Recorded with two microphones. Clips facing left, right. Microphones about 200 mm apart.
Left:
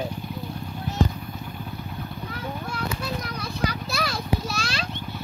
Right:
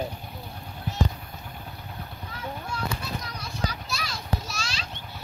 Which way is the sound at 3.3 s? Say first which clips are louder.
Left 5 dB; 60° left (ahead or behind).